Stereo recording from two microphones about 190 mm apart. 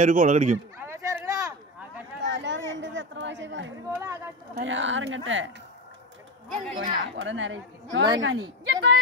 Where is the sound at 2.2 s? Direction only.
70° right (ahead or behind).